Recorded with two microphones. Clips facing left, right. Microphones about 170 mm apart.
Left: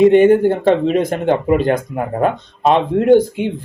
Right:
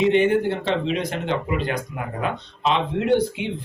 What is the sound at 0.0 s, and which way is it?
Speech, 50° left (ahead or behind).